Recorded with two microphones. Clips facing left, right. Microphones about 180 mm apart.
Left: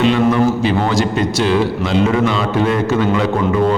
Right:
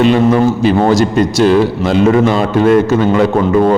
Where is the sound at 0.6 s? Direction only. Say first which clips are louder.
Right 6 dB; 45° right (ahead or behind).